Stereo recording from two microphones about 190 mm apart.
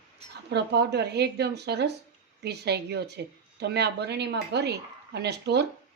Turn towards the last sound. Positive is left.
turn(degrees=-60)  # may be behind; listen again after turning